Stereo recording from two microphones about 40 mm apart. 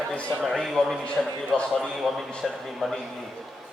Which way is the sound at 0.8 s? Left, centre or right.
Centre.